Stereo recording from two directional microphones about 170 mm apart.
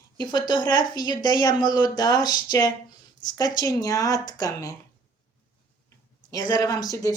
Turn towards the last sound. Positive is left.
turn(degrees=20)  # may be behind; listen again after turning